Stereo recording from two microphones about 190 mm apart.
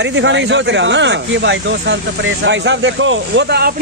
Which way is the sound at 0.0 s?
70° right (ahead or behind).